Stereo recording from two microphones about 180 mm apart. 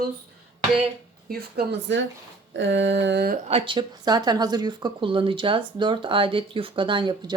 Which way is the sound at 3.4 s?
30° right (ahead or behind).